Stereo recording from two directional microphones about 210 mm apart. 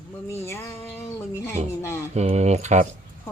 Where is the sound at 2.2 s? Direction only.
30° right (ahead or behind).